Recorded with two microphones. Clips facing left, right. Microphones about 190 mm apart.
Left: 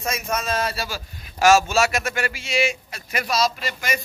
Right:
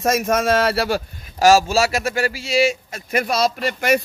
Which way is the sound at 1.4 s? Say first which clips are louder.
Right 2 dB; 35° right (ahead or behind).